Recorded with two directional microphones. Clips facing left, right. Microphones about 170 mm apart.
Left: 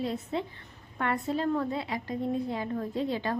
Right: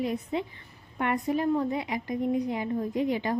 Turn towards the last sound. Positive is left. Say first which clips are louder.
# right 3 dB
turn(degrees=-15)  # may be behind; listen again after turning